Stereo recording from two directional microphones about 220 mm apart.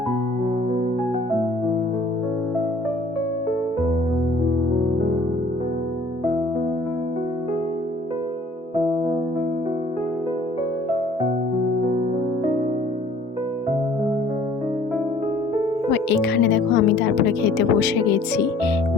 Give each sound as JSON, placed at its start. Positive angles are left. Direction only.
{"t": 15.9, "sound": "speech", "side_deg": 55}